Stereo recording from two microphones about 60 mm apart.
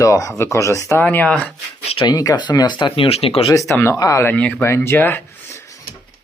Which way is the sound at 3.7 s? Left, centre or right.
Left.